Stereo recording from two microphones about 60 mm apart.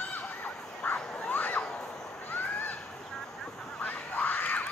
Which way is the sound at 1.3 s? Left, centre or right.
Left.